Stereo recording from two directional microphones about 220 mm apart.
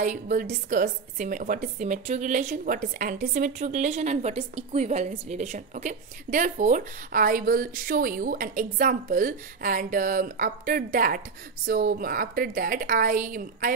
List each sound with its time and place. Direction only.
0.0 s a woman's voice: 35° right (ahead or behind)